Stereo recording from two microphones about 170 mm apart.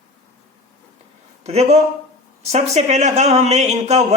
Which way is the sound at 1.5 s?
40° right (ahead or behind).